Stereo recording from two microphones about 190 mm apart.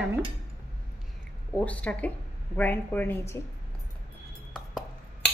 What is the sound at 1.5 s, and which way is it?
A woman's voice, 5° left (ahead or behind).